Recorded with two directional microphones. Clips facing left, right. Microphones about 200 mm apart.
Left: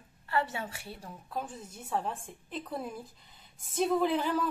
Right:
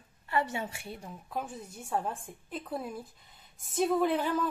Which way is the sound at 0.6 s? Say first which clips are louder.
Right 2 dB; 10° right (ahead or behind).